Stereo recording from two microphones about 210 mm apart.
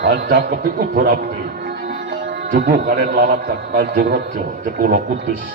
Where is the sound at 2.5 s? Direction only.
45° right (ahead or behind).